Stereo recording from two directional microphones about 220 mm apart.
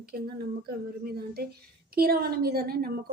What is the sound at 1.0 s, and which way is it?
A woman's voice, 45° right (ahead or behind).